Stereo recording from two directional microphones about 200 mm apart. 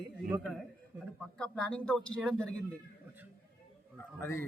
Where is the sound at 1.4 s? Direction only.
5° left (ahead or behind).